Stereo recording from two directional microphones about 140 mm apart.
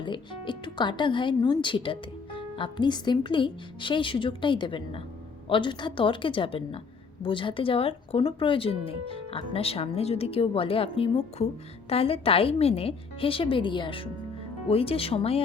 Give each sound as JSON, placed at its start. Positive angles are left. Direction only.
{"t": 0.0, "sound": "speech", "side_deg": 35}